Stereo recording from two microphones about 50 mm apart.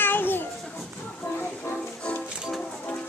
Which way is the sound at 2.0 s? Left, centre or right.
Centre.